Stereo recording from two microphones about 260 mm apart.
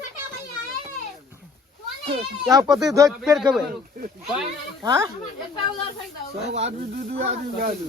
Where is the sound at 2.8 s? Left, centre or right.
Centre.